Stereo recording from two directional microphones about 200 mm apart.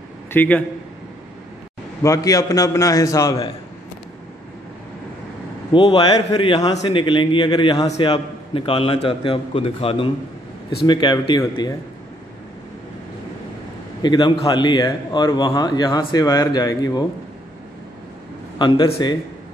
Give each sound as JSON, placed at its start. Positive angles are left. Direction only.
{"t": 0.3, "sound": "a man's voice", "side_deg": 10}
{"t": 2.0, "sound": "a man's voice", "side_deg": 15}
{"t": 5.7, "sound": "a man's voice", "side_deg": 25}
{"t": 14.0, "sound": "a man's voice", "side_deg": 20}
{"t": 18.6, "sound": "a man's voice", "side_deg": 25}